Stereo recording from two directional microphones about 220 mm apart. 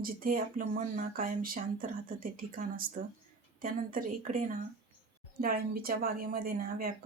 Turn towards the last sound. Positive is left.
turn(degrees=-40)  # may be behind; listen again after turning